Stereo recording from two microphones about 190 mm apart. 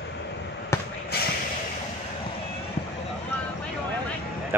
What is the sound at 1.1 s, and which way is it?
Vehicle, 55° left (ahead or behind).